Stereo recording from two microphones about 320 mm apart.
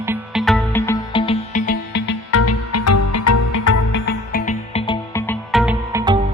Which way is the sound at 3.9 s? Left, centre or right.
Left.